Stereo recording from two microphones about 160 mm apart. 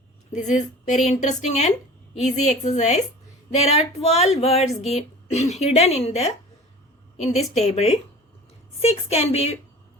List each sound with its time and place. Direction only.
0.3 s a woman's voice: 50° left (ahead or behind)
3.5 s female singing: 40° left (ahead or behind)
4.9 s a woman's voice: 45° left (ahead or behind)
7.2 s female singing: 40° left (ahead or behind)